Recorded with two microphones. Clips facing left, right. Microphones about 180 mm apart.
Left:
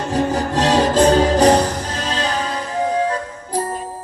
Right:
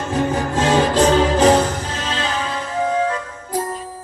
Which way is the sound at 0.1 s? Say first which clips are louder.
Left 1 dB; 35° left (ahead or behind).